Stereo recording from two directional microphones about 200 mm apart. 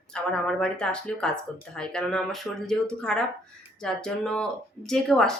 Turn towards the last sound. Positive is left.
turn(degrees=5)  # may be behind; listen again after turning